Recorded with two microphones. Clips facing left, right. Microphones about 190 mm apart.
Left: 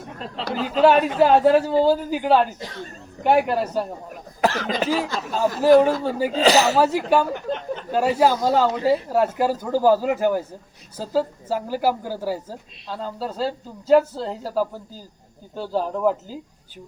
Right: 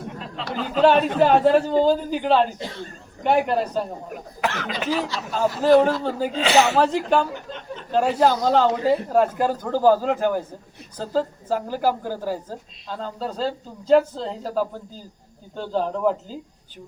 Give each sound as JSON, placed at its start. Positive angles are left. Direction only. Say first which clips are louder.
{"t": 0.3, "sound": "a sound", "louder": "left 3 dB", "side_deg": 35}
{"t": 0.8, "sound": "a man's voice", "louder": "left 1 dB", "side_deg": 10}
{"t": 4.4, "sound": "speech", "louder": "left 5 dB", "side_deg": 35}
{"t": 5.0, "sound": "speech", "louder": "left 1 dB", "side_deg": 50}
{"t": 5.6, "sound": "a man's voice", "louder": "left 2 dB", "side_deg": 10}
{"t": 6.3, "sound": "speech", "louder": "left 2 dB", "side_deg": 40}
{"t": 6.7, "sound": "a man's voice", "louder": "left 1 dB", "side_deg": 5}